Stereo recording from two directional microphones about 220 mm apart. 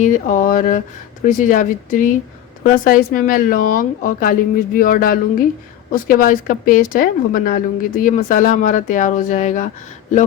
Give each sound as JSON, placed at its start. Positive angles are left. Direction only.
{"t": 0.0, "sound": "a woman's voice", "side_deg": 35}